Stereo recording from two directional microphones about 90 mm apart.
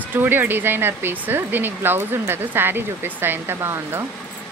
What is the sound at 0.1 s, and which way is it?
Speech, 20° right (ahead or behind).